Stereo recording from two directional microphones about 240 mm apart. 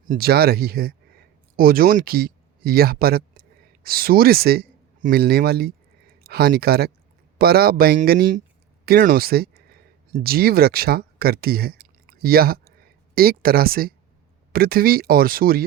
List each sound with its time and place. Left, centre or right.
0.1 s speech: right